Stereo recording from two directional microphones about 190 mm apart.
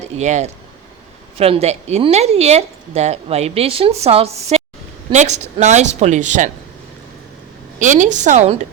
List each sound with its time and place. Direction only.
0.0 s a woman's voice: 40° right (ahead or behind)
7.8 s a woman's voice: 40° right (ahead or behind)